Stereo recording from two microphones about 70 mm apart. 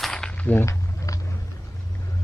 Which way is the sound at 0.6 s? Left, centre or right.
Left.